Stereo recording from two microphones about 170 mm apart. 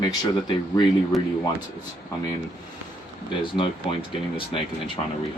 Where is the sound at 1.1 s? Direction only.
Centre (ahead or behind).